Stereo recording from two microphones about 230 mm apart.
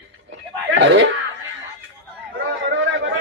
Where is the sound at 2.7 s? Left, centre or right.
Right.